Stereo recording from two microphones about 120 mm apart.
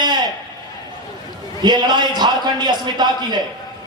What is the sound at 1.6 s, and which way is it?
Speech, 40° right (ahead or behind).